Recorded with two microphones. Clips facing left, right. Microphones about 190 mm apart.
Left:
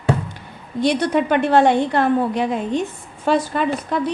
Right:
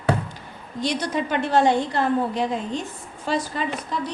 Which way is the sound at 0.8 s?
60° left (ahead or behind).